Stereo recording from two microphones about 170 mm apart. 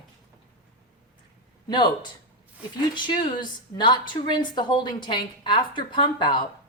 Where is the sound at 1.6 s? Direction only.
25° left (ahead or behind).